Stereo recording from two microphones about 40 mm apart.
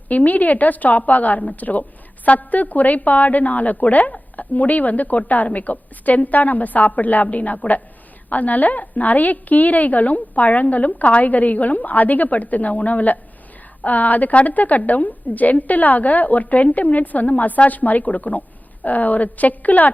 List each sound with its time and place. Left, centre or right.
0.1 s a woman's voice: left